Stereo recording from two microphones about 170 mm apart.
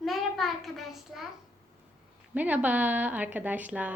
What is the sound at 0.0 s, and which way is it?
Child singing, centre (ahead or behind).